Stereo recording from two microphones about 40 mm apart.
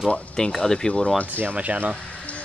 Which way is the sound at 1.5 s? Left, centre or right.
Right.